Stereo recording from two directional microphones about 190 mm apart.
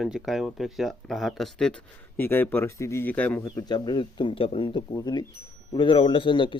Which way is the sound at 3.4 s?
25° left (ahead or behind).